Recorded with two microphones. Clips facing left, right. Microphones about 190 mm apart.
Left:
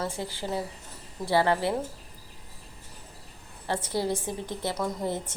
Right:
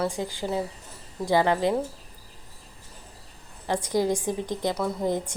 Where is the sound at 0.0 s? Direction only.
15° right (ahead or behind).